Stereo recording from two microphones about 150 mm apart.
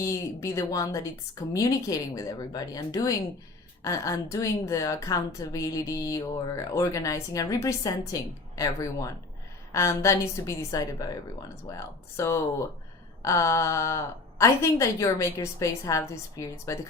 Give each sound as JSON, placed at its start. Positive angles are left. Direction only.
{"t": 0.0, "sound": "a woman's voice", "side_deg": 20}